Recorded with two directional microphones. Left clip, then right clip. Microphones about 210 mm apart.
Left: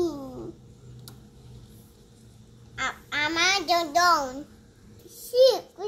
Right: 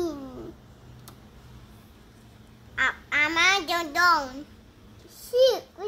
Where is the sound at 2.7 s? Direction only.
15° right (ahead or behind).